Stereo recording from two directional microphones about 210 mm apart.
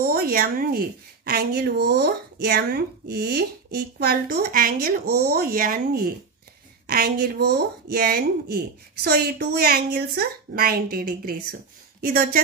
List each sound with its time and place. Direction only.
0.0 s a woman's voice: 45° right (ahead or behind)